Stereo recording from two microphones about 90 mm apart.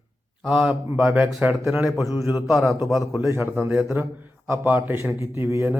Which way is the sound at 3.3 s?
25° right (ahead or behind).